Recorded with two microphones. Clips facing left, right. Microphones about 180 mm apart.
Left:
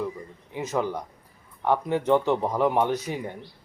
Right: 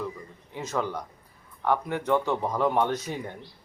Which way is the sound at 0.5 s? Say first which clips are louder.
Left 3 dB; 15° left (ahead or behind).